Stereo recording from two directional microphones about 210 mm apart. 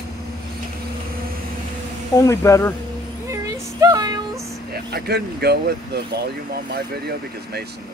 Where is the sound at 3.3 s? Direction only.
15° right (ahead or behind).